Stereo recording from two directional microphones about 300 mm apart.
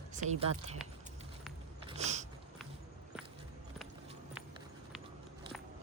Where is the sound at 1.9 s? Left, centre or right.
Right.